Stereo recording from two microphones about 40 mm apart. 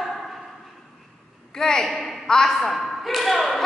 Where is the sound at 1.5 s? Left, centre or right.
Centre.